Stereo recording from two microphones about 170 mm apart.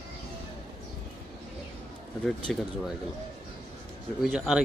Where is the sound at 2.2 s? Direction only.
Centre (ahead or behind).